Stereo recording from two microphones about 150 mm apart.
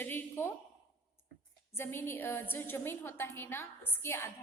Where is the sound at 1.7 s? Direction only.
15° left (ahead or behind).